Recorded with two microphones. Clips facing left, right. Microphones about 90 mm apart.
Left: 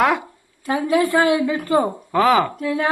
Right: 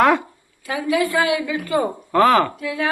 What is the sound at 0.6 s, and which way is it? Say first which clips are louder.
A woman's voice: left 2 dB; 35° left (ahead or behind).